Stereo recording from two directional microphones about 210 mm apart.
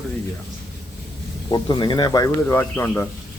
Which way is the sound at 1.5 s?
20° left (ahead or behind).